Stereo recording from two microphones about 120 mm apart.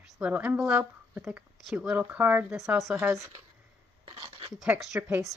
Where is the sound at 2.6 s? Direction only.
25° right (ahead or behind).